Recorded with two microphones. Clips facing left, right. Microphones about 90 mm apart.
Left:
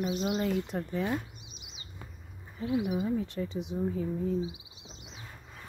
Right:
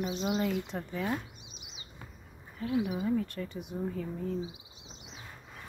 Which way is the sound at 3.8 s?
15° left (ahead or behind).